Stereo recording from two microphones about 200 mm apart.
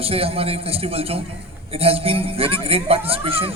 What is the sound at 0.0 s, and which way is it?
A man's voice, 30° right (ahead or behind).